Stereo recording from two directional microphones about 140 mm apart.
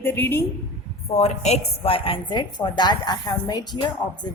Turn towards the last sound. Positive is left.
turn(degrees=30)  # may be behind; listen again after turning